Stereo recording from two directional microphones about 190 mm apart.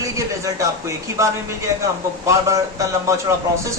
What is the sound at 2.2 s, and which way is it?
Speech, 15° right (ahead or behind).